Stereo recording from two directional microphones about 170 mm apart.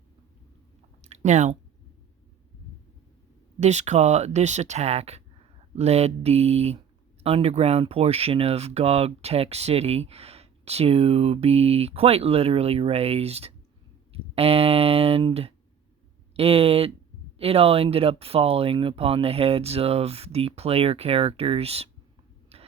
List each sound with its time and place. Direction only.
1.0 s chewing: 40° right (ahead or behind)
3.6 s speech: 40° right (ahead or behind)
22.5 s a sound: 35° right (ahead or behind)